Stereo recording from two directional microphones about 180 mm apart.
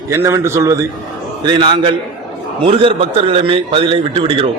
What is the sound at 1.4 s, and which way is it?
A man's voice, 25° right (ahead or behind).